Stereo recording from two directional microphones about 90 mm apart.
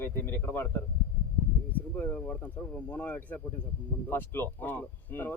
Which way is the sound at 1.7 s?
20° left (ahead or behind).